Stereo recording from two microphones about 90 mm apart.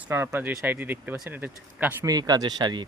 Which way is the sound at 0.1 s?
30° right (ahead or behind).